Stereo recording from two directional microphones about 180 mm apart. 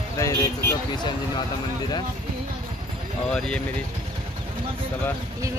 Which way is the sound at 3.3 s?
5° left (ahead or behind).